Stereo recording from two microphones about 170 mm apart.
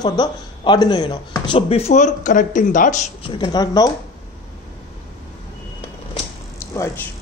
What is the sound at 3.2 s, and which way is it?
Speech, 25° left (ahead or behind).